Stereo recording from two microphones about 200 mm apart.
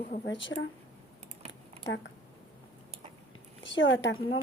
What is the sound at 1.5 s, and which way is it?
Typing, 65° left (ahead or behind).